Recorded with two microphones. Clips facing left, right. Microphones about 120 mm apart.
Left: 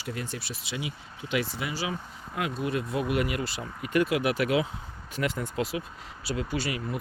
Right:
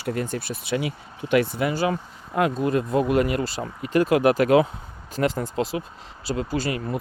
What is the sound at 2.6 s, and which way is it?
Speech, 40° right (ahead or behind).